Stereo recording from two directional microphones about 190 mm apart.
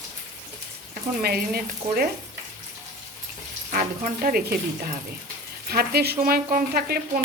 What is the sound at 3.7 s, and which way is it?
Sizzle, 45° right (ahead or behind).